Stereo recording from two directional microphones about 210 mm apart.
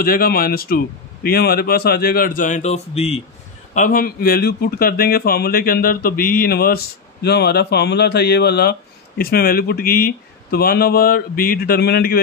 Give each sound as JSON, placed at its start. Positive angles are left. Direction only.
{"t": 0.0, "sound": "a man's voice", "side_deg": 45}
{"t": 3.7, "sound": "a man's voice", "side_deg": 40}